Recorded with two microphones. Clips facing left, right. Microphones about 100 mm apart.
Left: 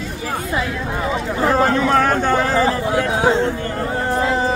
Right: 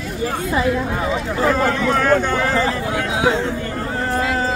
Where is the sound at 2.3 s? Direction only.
30° left (ahead or behind).